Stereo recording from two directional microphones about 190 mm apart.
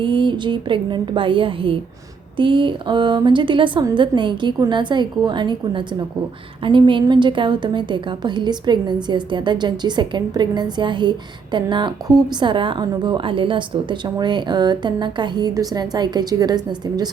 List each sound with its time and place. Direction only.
0.0 s a woman's voice: 25° right (ahead or behind)